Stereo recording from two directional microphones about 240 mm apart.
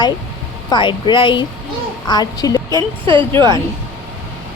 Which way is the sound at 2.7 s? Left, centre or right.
Right.